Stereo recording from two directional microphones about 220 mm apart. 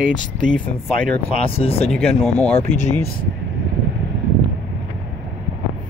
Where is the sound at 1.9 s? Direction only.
Centre (ahead or behind).